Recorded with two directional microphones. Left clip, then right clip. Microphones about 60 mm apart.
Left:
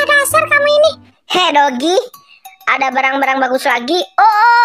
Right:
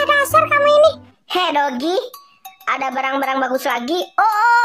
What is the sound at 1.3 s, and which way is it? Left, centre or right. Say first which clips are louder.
A woman's voice: left 6 dB; left.